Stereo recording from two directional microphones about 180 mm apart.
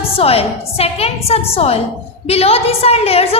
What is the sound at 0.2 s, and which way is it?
A woman's voice, 35° left (ahead or behind).